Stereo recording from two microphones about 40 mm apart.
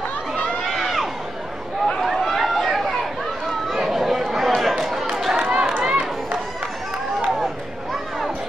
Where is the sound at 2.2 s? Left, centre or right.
Centre.